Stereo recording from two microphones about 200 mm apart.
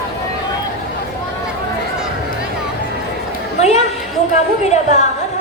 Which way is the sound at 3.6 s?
35° left (ahead or behind).